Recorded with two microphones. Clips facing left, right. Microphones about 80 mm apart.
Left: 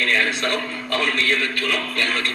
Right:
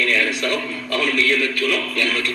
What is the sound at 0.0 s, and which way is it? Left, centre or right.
A man's voice, left.